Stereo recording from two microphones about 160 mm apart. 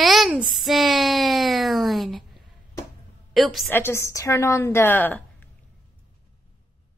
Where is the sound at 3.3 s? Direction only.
Centre (ahead or behind).